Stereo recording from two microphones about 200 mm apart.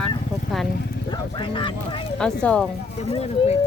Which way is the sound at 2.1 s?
5° left (ahead or behind).